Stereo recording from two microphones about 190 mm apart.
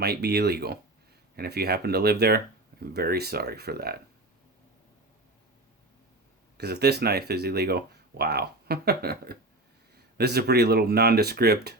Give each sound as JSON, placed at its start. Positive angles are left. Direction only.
{"t": 0.0, "sound": "speech", "side_deg": -60}
{"t": 6.6, "sound": "speech", "side_deg": -60}